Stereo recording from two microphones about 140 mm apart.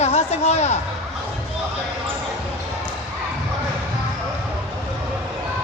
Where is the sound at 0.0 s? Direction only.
45° left (ahead or behind).